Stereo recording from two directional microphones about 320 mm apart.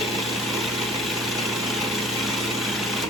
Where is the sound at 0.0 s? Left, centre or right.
Centre.